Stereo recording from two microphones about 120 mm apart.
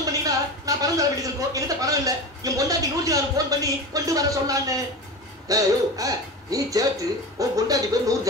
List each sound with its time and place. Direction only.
0.0 s speech: 30° right (ahead or behind)